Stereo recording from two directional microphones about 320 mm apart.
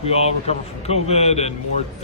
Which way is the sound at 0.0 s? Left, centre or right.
Centre.